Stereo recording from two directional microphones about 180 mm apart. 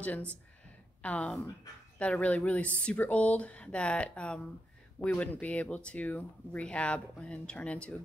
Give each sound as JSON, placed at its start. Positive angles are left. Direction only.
{"t": 0.0, "sound": "speech", "side_deg": 10}